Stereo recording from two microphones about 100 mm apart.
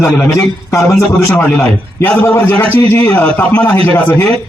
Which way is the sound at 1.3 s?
25° left (ahead or behind).